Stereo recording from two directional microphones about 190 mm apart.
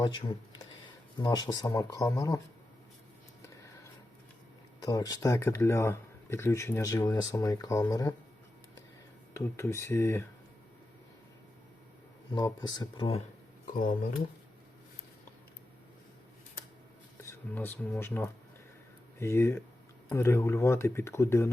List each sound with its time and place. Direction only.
0.0 s speech: 25° left (ahead or behind)
4.8 s speech: 20° left (ahead or behind)
9.3 s speech: 15° left (ahead or behind)
12.3 s speech: 20° left (ahead or behind)
13.7 s speech: 45° left (ahead or behind)
17.2 s speech: 10° left (ahead or behind)